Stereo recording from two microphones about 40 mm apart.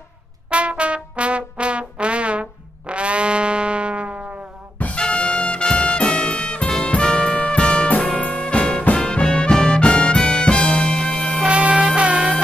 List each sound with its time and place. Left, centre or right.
0.5 s music: right
4.9 s music: left
11.4 s music: right